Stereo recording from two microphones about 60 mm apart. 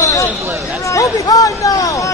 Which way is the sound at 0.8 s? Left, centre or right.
Left.